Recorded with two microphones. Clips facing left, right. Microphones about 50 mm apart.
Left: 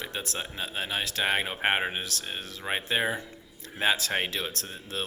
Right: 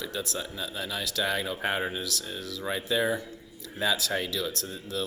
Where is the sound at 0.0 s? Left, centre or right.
Left.